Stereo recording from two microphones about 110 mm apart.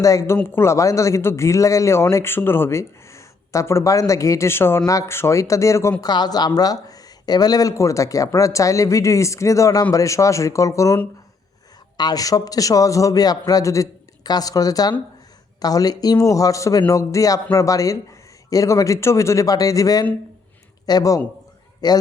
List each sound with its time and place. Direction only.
0.0 s speech: 30° left (ahead or behind)
6.0 s a woman's voice: 40° left (ahead or behind)